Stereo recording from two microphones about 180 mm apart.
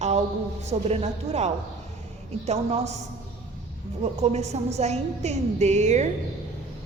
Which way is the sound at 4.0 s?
35° right (ahead or behind).